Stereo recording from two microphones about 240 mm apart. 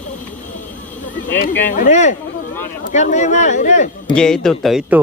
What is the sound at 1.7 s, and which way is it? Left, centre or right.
Speech, left.